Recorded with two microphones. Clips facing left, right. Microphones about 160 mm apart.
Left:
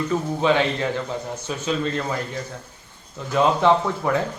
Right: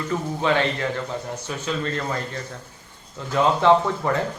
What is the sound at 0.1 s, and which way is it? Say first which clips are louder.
Speech: left 1 dB; 20° left (ahead or behind).